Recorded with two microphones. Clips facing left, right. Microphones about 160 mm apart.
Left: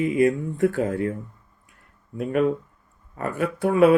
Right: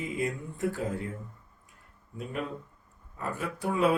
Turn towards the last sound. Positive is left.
turn(degrees=65)  # may be behind; listen again after turning